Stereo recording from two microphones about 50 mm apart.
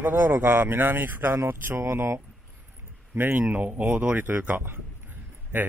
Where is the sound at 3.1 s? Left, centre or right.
Right.